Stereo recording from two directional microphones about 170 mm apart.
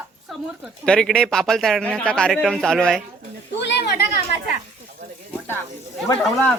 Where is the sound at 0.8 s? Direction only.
5° left (ahead or behind).